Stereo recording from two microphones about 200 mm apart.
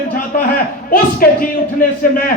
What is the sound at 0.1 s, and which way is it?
A man's voice, 45° left (ahead or behind).